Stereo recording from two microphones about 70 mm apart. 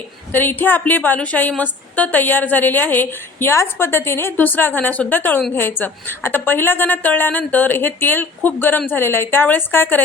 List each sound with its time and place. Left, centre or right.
0.3 s a woman's voice: left
3.5 s a woman's voice: left